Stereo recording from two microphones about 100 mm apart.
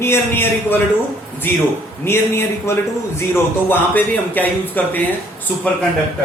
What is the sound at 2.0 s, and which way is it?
Speech, 25° left (ahead or behind).